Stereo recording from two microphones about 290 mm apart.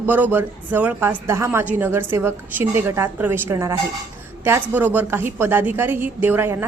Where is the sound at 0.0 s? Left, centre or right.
Centre.